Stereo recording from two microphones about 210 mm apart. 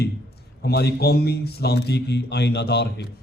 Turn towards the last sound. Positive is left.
turn(degrees=50)  # may be behind; listen again after turning